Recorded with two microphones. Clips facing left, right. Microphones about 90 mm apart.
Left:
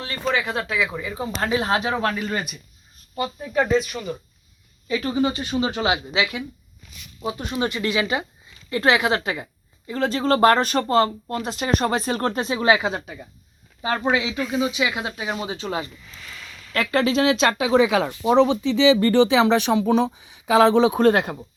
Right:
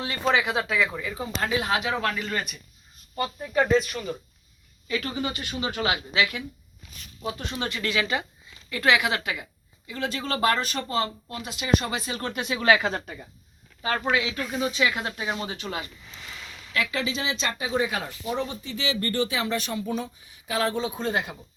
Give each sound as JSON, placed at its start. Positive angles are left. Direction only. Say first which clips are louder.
{"t": 0.0, "sound": "speech", "louder": "even", "side_deg": -10}
{"t": 1.0, "sound": "speech", "louder": "left 3 dB", "side_deg": 20}
{"t": 1.4, "sound": "speech", "louder": "left 4 dB", "side_deg": 30}
{"t": 3.2, "sound": "speech", "louder": "left 2 dB", "side_deg": 5}
{"t": 4.9, "sound": "a woman's voice", "louder": "left 7 dB", "side_deg": 25}
{"t": 12.9, "sound": "speech", "louder": "left 2 dB", "side_deg": 5}
{"t": 13.8, "sound": "speech", "louder": "left 3 dB", "side_deg": 20}
{"t": 14.4, "sound": "speech", "louder": "left 5 dB", "side_deg": -5}
{"t": 14.7, "sound": "speech", "louder": "left 1 dB", "side_deg": 10}
{"t": 16.0, "sound": "a sound", "louder": "left 1 dB", "side_deg": -20}
{"t": 16.7, "sound": "speech", "louder": "left 8 dB", "side_deg": 50}